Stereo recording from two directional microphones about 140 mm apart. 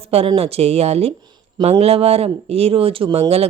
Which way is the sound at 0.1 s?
45° right (ahead or behind).